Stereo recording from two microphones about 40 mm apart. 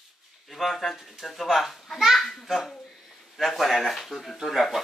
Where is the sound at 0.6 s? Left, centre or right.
Centre.